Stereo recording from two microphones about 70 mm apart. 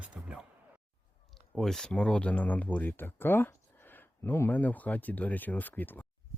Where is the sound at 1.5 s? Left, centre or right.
Centre; by 3.5 s left.